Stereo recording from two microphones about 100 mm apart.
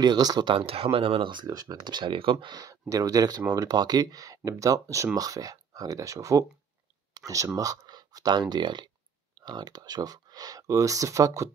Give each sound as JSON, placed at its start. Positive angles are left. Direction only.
{"t": 0.0, "sound": "speech", "side_deg": -40}
{"t": 0.6, "sound": "speech", "side_deg": -65}
{"t": 2.4, "sound": "speech", "side_deg": -40}